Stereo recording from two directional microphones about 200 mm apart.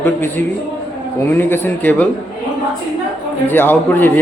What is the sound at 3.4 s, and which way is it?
Speech, 10° left (ahead or behind).